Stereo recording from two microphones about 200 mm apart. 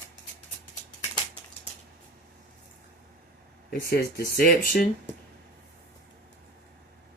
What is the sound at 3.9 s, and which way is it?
Speech, 50° left (ahead or behind).